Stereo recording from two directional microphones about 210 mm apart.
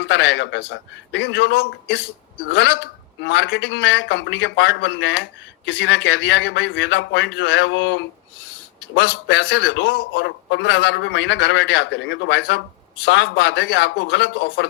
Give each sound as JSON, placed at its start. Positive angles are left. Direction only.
{"t": 0.0, "sound": "a man's voice", "side_deg": 60}